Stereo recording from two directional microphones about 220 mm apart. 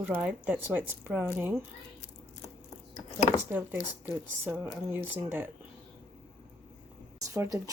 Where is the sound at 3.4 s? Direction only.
10° right (ahead or behind).